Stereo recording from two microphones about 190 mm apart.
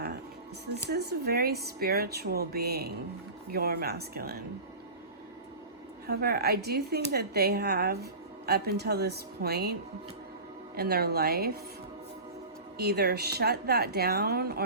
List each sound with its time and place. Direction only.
0.9 s speech: 55° right (ahead or behind)
6.1 s speech: 55° right (ahead or behind)
10.8 s speech: 55° right (ahead or behind)
12.7 s speech: 55° right (ahead or behind)